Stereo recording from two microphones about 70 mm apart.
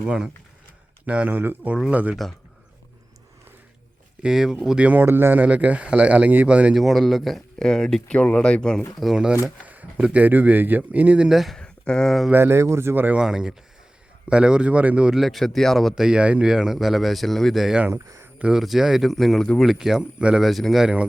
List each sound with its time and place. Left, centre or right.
0.0 s a man's voice: centre
4.2 s a man's voice: centre
4.8 s speech: right
6.7 s speech: centre
9.1 s a man's voice: centre
11.3 s speech: centre
11.5 s speech: centre
12.3 s speech: right
13.1 s a man's voice: centre
15.1 s speech: centre
16.0 s speech: centre
20.1 s a man's voice: centre
20.4 s speech: centre